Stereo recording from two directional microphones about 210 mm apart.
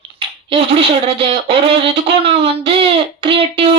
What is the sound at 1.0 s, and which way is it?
Speech, 25° right (ahead or behind).